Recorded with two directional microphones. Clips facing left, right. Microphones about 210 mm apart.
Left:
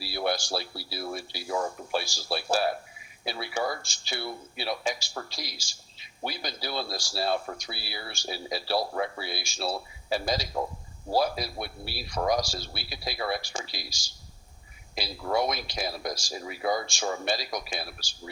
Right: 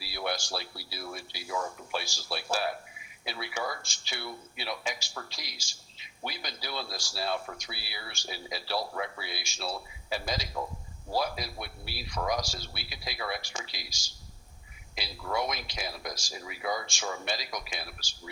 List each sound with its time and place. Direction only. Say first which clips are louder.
0.0 s speech: left 5 dB; 35° left (ahead or behind)
14.9 s speech: left 5 dB; 35° left (ahead or behind)